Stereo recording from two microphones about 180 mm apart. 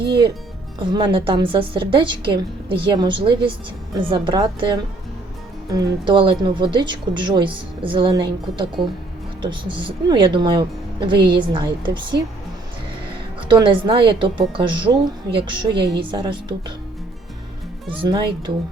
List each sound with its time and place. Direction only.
0.8 s speech: 25° right (ahead or behind)
13.5 s speech: 25° right (ahead or behind)
18.0 s speech: 25° right (ahead or behind)